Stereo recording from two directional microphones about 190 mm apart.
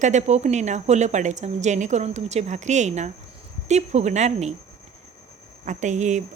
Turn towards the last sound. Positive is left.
turn(degrees=-40)  # may be behind; listen again after turning